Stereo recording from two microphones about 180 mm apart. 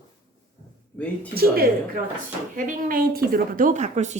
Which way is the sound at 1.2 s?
55° right (ahead or behind).